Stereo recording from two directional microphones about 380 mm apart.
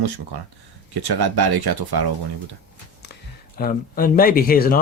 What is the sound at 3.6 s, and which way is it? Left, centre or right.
Speech, left.